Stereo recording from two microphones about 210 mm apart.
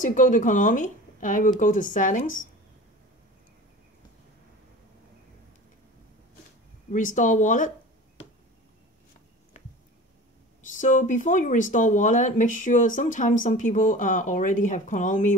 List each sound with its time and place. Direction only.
0.0 s speech: 40° left (ahead or behind)
6.9 s speech: 35° left (ahead or behind)
10.7 s speech: 35° left (ahead or behind)